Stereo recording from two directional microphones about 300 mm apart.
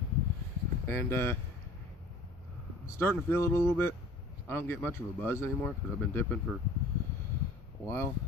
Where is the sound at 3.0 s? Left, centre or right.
Centre.